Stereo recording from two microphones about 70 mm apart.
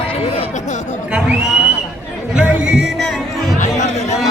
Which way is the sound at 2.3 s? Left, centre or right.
Centre.